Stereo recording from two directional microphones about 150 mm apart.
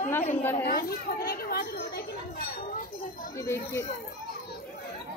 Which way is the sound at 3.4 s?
15° left (ahead or behind).